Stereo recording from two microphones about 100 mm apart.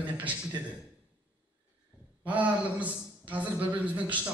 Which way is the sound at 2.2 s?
15° right (ahead or behind).